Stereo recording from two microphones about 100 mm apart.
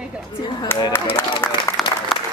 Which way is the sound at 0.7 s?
20° left (ahead or behind).